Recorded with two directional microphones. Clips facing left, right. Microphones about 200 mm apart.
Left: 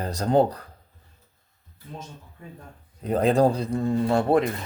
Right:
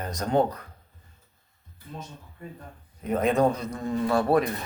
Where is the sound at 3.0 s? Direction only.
35° left (ahead or behind).